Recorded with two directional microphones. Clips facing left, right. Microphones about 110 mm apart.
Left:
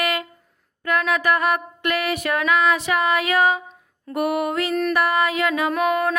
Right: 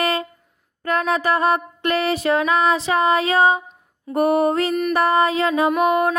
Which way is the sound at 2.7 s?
20° right (ahead or behind).